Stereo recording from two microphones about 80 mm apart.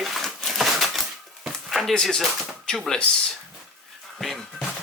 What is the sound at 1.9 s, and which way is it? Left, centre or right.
Speech, centre.